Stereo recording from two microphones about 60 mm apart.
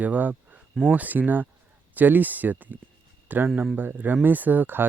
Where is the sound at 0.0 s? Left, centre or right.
Right.